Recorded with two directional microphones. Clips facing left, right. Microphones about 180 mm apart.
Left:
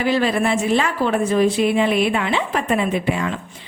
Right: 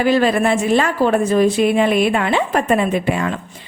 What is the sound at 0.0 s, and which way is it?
Speech, 45° right (ahead or behind).